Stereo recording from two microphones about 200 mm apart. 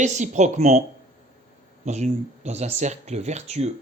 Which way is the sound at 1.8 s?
35° right (ahead or behind).